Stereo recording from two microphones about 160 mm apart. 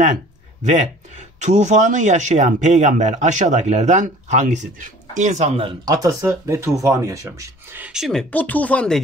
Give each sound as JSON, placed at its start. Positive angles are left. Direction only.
{"t": 0.7, "sound": "speech", "side_deg": -45}
{"t": 5.6, "sound": "speech", "side_deg": -30}
{"t": 6.0, "sound": "speech", "side_deg": -20}